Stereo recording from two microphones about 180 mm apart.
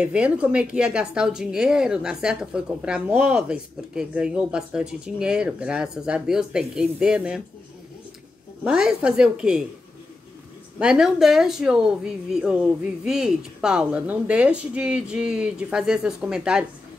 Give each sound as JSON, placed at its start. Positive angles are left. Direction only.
{"t": 0.0, "sound": "speech", "side_deg": -5}
{"t": 8.6, "sound": "speech", "side_deg": -5}
{"t": 10.8, "sound": "speech", "side_deg": -5}